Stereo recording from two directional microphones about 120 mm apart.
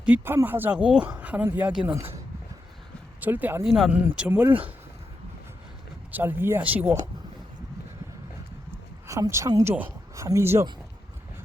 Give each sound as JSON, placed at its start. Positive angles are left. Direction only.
{"t": 0.0, "sound": "speech", "side_deg": -15}
{"t": 3.6, "sound": "speech", "side_deg": 0}
{"t": 6.1, "sound": "speech", "side_deg": -15}
{"t": 9.0, "sound": "speech", "side_deg": -25}